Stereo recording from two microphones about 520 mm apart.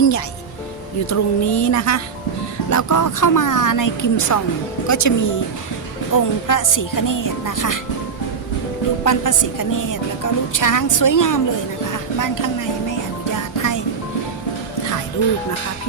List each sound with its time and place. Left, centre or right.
1.1 s a woman's voice: left
9.0 s a woman's voice: left
13.6 s music: left